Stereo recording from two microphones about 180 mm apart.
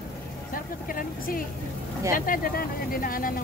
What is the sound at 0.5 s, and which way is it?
Speech, 50° left (ahead or behind).